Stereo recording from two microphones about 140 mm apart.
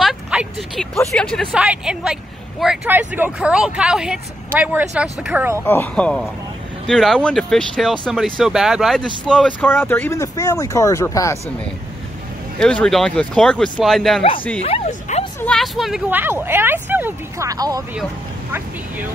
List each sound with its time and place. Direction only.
0.0 s a sound: 5° right (ahead or behind)
1.1 s speech: 5° left (ahead or behind)
1.5 s speech: 5° right (ahead or behind)
2.9 s speech: 15° right (ahead or behind)
5.6 s speech: 15° left (ahead or behind)
12.5 s speech: 5° left (ahead or behind)
14.6 s speech: 50° left (ahead or behind)
15.4 s speech: centre (ahead or behind)
16.1 s speech: 15° right (ahead or behind)